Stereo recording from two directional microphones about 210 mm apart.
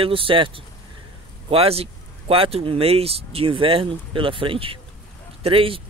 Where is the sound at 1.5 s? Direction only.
30° right (ahead or behind).